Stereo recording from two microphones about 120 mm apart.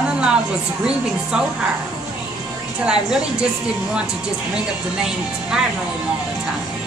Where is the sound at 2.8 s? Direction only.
5° right (ahead or behind).